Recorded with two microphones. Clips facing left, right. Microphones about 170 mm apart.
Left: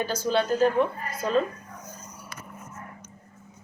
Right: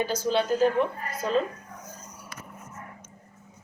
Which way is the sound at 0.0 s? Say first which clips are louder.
Even; 15° right (ahead or behind).